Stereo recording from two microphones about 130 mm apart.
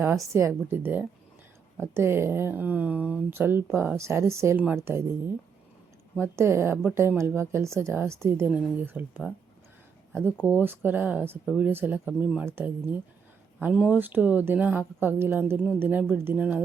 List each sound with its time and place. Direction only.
0.0 s speech: 20° right (ahead or behind)
4.5 s speech: 10° right (ahead or behind)
6.1 s speech: 20° right (ahead or behind)
8.4 s speech: 10° right (ahead or behind)
10.3 s speech: 15° left (ahead or behind)
10.6 s speech: 15° right (ahead or behind)